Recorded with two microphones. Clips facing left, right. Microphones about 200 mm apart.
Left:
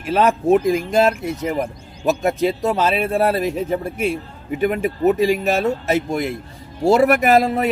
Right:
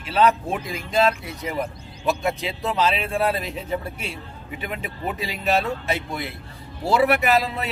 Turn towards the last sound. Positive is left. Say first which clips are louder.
# left 6 dB
turn(degrees=50)  # may be behind; listen again after turning